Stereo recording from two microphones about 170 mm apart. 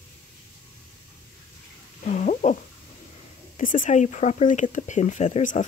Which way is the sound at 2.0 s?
45° left (ahead or behind).